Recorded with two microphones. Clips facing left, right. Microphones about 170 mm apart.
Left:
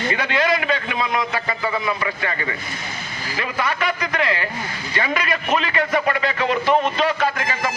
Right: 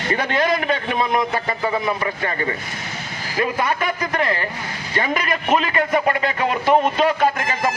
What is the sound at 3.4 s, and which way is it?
A man's voice, 50° right (ahead or behind).